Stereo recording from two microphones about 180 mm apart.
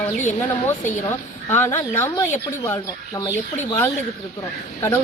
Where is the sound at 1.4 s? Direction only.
15° left (ahead or behind).